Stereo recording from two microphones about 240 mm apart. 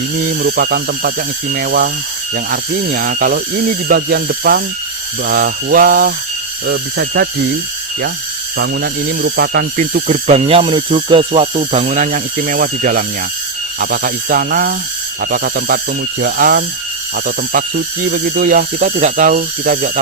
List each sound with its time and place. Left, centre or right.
0.3 s speech: right
8.5 s speech: right